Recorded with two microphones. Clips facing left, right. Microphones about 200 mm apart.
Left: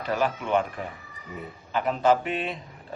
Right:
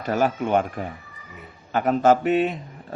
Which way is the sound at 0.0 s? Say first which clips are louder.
Right 4 dB; 45° right (ahead or behind).